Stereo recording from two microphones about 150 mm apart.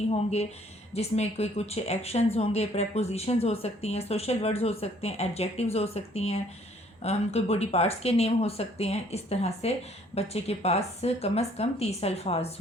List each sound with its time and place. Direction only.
0.1 s speech: 45° left (ahead or behind)